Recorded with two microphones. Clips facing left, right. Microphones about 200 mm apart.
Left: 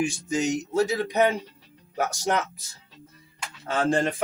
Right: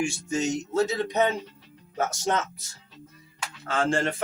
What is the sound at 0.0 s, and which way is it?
A man's voice, 15° left (ahead or behind).